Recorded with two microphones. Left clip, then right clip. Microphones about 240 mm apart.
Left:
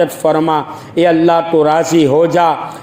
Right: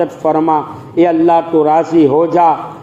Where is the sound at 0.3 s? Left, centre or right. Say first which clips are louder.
Right 3 dB; left.